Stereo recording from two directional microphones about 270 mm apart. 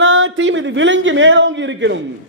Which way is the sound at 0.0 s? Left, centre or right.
Right.